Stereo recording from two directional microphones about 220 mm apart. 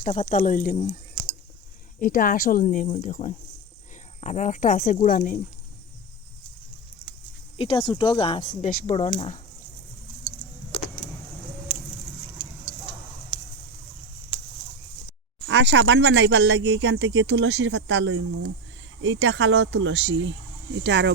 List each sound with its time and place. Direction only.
0.0 s speech: 30° left (ahead or behind)
2.0 s speech: 40° left (ahead or behind)
7.6 s speech: 20° left (ahead or behind)
13.3 s a sound: 20° right (ahead or behind)
15.4 s speech: 55° right (ahead or behind)